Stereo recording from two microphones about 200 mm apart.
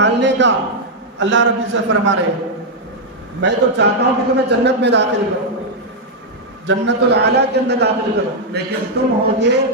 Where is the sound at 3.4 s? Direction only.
60° right (ahead or behind).